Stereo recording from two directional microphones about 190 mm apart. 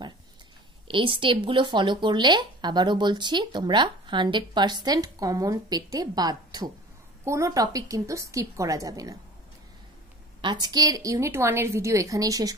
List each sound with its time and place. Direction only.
0.8 s a woman's voice: 25° right (ahead or behind)
10.4 s a woman's voice: 25° right (ahead or behind)